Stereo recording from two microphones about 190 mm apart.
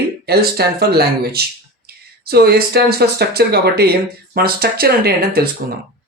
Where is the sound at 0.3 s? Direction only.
55° right (ahead or behind).